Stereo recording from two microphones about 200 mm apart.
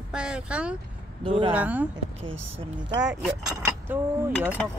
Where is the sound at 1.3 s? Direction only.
25° right (ahead or behind).